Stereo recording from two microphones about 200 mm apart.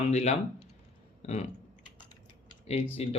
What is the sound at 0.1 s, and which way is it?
Speech, 35° left (ahead or behind).